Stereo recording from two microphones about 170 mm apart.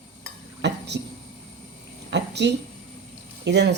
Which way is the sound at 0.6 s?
90° right.